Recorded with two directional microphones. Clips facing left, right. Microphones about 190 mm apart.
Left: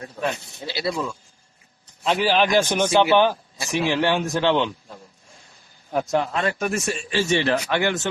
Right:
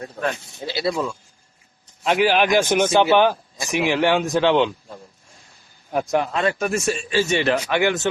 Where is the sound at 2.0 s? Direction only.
15° right (ahead or behind).